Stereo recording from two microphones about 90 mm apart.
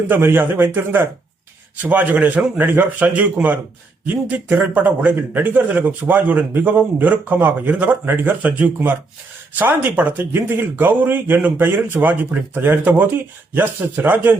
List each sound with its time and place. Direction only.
0.1 s a man's voice: 25° right (ahead or behind)